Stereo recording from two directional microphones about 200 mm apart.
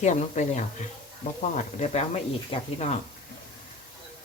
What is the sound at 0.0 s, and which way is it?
Speech, 35° left (ahead or behind).